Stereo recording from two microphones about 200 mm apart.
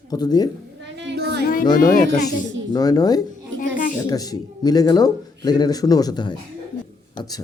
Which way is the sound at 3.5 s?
40° left (ahead or behind).